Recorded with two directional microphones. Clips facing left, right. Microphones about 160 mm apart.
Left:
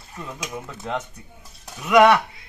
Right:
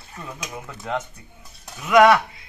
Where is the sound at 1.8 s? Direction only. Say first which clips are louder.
Even; 10° left (ahead or behind).